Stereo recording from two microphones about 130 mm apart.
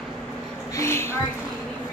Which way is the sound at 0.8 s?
20° left (ahead or behind).